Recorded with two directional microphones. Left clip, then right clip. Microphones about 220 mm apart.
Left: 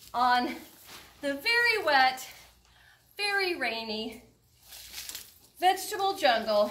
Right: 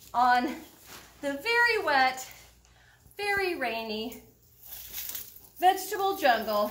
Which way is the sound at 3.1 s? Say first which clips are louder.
Even; 10° right (ahead or behind).